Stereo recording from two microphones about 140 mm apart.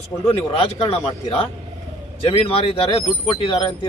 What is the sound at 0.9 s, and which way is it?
Speech, 45° left (ahead or behind).